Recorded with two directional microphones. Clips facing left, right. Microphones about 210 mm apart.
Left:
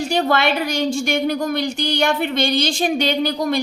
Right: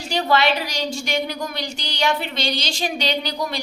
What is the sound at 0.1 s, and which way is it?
A woman's voice, 50° left (ahead or behind).